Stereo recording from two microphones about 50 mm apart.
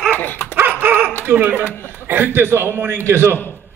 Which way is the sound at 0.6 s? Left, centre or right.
Right.